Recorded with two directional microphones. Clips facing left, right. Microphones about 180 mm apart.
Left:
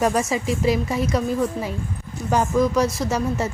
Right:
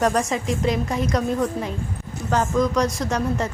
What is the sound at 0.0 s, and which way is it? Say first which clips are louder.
A woman's voice: even; 5° left (ahead or behind).